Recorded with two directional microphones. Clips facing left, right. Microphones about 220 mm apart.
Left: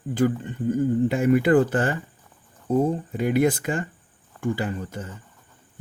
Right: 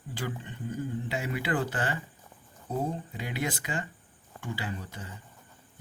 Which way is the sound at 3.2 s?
50° left (ahead or behind).